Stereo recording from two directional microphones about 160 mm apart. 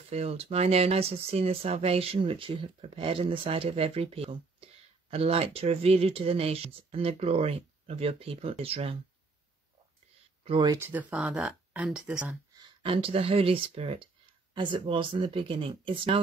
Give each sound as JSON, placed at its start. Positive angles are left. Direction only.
{"t": 0.1, "sound": "speech", "side_deg": -40}
{"t": 10.4, "sound": "speech", "side_deg": -30}
{"t": 10.8, "sound": "speech", "side_deg": -10}
{"t": 12.5, "sound": "speech", "side_deg": -30}